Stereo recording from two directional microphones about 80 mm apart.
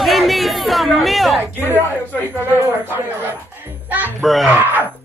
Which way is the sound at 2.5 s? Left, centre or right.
Right.